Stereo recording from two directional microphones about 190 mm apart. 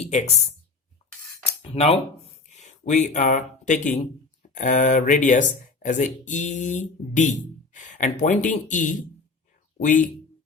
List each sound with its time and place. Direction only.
0.1 s speech: 35° left (ahead or behind)
1.6 s speech: 35° left (ahead or behind)